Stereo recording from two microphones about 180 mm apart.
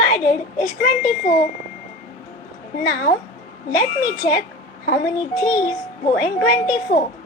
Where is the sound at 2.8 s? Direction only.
55° left (ahead or behind).